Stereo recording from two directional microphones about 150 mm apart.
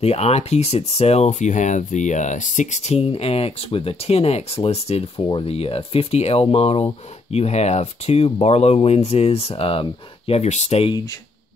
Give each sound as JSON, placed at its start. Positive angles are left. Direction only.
{"t": 0.0, "sound": "speech", "side_deg": 45}